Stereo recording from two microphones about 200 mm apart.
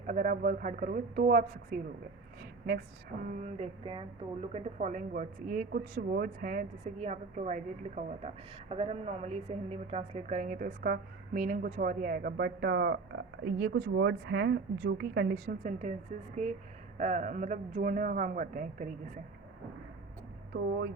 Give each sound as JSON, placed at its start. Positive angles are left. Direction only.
{"t": 0.1, "sound": "a woman's voice", "side_deg": -40}
{"t": 2.4, "sound": "a sound", "side_deg": -50}
{"t": 3.2, "sound": "a woman's voice", "side_deg": -35}
{"t": 20.5, "sound": "speech", "side_deg": -65}